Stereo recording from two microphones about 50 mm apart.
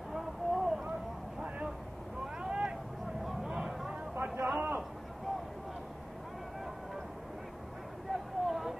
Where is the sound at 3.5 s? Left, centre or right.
Centre.